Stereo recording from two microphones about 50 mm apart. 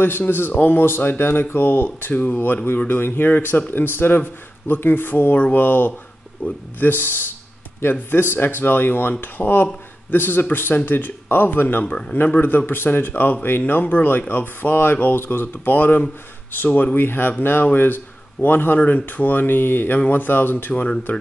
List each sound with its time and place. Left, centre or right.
0.2 s a man's voice: left
6.4 s speech: left
6.8 s a man's voice: left
11.8 s speech: left
12.4 s a man's voice: left
18.8 s speech: left
19.0 s a man's voice: left
20.6 s speech: left